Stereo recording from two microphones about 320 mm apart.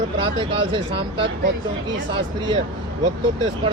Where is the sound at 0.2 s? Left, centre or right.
Centre.